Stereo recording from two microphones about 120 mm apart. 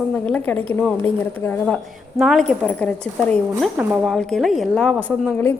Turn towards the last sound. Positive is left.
turn(degrees=5)  # may be behind; listen again after turning